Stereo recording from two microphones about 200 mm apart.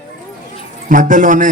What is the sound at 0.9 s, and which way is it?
Speech, 40° right (ahead or behind).